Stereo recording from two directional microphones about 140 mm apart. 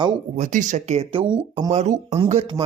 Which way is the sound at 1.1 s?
35° right (ahead or behind).